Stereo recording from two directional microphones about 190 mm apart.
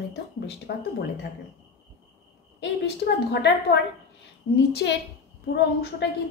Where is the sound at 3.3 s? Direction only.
60° left (ahead or behind).